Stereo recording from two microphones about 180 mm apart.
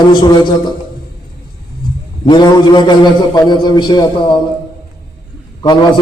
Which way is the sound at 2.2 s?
25° left (ahead or behind).